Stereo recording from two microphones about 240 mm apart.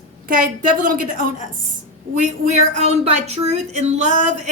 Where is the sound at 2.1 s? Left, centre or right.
Right.